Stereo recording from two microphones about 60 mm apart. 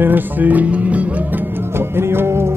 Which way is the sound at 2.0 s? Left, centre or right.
Right.